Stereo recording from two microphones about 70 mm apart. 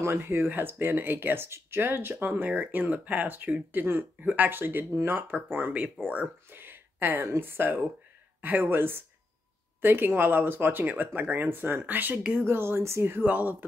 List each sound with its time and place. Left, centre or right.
0.0 s speech: right